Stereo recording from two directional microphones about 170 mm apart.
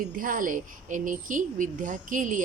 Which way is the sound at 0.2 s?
55° right (ahead or behind).